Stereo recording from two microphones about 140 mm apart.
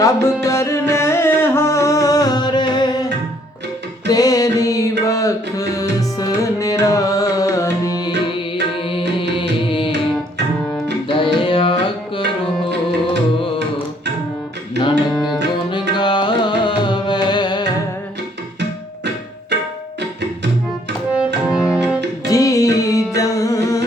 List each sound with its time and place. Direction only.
0.0 s music: 20° left (ahead or behind)
4.1 s music: 25° left (ahead or behind)
8.9 s music: 40° left (ahead or behind)
11.1 s tabla: 40° left (ahead or behind)
15.1 s music: centre (ahead or behind)
15.7 s music: 35° left (ahead or behind)
21.1 s music: 5° right (ahead or behind)
22.3 s music: 25° left (ahead or behind)